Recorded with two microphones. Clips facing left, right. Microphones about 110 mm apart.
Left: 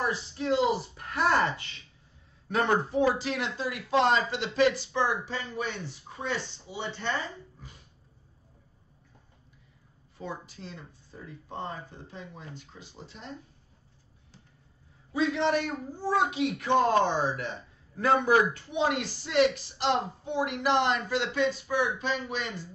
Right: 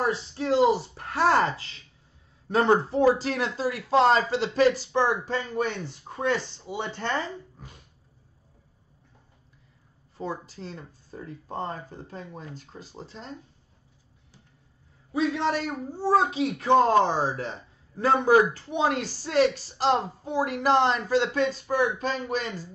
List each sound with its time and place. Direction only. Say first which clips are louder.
0.0 s speech: right 3 dB; 35° right (ahead or behind); by 7.2 s 50° right (ahead or behind)
10.1 s speech: right 5 dB; 40° right (ahead or behind)
15.3 s speech: even; 35° right (ahead or behind)